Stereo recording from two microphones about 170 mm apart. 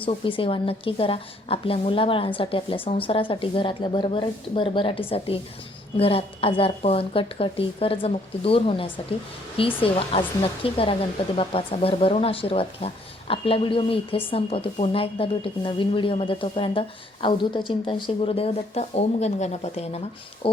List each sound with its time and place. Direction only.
0.0 s speech: 30° left (ahead or behind)